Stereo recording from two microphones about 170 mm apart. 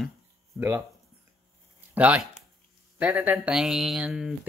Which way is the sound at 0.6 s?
15° right (ahead or behind).